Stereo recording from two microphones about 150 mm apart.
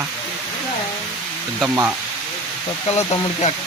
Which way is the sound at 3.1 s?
50° left (ahead or behind).